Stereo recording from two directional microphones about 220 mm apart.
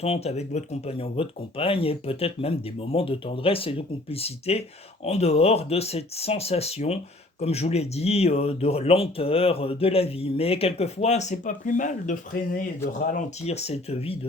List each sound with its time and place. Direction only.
0.0 s speech: 30° left (ahead or behind)